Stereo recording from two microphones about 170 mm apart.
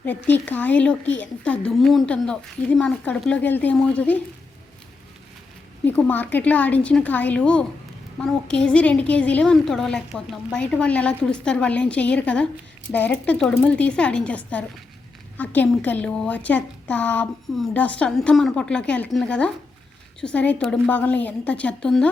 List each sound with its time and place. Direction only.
0.0 s a woman's voice: 10° left (ahead or behind)
5.8 s a woman's voice: 10° left (ahead or behind)